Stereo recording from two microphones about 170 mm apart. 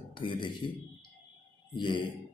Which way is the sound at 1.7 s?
30° left (ahead or behind).